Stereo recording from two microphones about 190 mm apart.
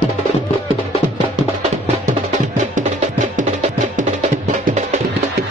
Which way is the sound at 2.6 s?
40° right (ahead or behind).